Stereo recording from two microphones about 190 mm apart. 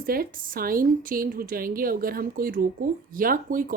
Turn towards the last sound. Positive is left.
turn(degrees=-45)  # may be behind; listen again after turning